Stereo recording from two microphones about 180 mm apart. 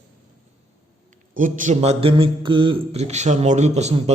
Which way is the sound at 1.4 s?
45° right (ahead or behind).